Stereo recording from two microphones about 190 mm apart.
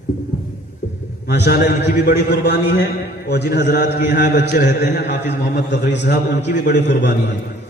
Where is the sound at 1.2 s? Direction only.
60° left (ahead or behind).